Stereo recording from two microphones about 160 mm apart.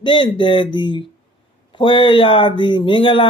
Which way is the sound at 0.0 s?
30° left (ahead or behind).